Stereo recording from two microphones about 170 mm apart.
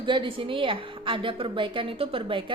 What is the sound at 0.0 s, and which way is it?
A woman's voice, 30° right (ahead or behind).